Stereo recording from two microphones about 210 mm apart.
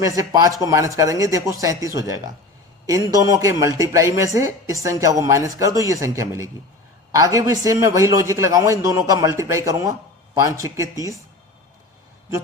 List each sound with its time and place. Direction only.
0.0 s a man's voice: 15° right (ahead or behind)